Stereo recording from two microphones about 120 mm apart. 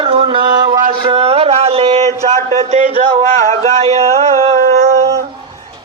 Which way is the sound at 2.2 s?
65° right (ahead or behind).